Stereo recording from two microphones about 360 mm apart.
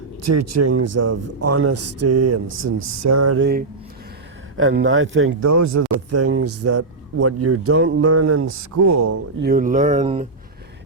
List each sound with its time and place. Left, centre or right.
0.2 s speech: right
3.3 s speech: right
5.4 s speech: right
9.4 s speech: right